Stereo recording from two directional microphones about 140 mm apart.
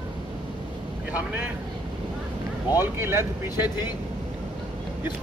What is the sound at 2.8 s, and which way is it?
Speech, 15° right (ahead or behind).